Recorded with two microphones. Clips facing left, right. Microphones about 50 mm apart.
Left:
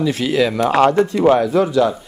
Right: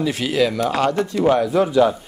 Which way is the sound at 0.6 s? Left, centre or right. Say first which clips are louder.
Left 6 dB; left.